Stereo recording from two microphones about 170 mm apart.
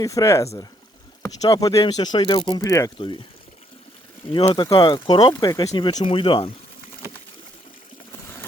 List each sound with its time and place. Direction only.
0.0 s speech: 20° left (ahead or behind)
4.5 s speech: 25° left (ahead or behind)